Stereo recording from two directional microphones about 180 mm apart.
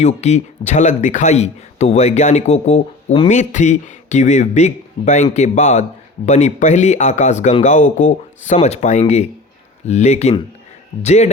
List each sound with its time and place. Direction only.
0.0 s speech: 40° left (ahead or behind)